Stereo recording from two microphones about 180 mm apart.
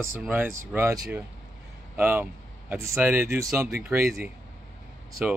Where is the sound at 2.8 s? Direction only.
15° right (ahead or behind).